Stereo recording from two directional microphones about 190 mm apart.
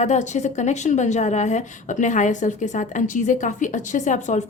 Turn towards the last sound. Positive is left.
turn(degrees=40)  # may be behind; listen again after turning